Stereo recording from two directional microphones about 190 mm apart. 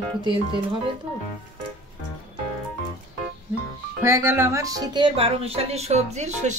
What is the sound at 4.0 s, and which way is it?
Speech, 15° right (ahead or behind).